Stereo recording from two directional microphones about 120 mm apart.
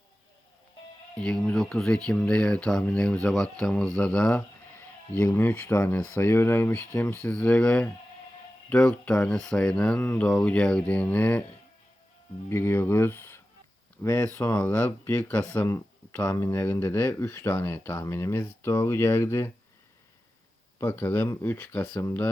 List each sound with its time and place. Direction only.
1.1 s speech: 5° left (ahead or behind)
12.5 s speech: 20° left (ahead or behind)
20.7 s speech: 20° left (ahead or behind)